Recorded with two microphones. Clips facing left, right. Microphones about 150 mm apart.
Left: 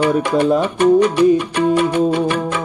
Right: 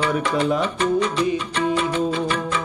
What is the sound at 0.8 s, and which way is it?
Music, 60° left (ahead or behind).